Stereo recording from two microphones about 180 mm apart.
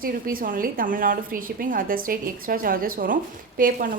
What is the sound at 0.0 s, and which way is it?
A woman's voice, 50° right (ahead or behind).